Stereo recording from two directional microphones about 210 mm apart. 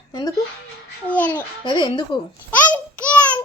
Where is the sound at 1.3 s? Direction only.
25° left (ahead or behind).